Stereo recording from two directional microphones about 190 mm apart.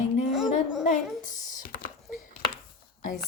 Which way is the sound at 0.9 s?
40° left (ahead or behind).